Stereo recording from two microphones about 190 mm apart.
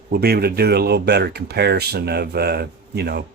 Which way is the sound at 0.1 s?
55° right (ahead or behind).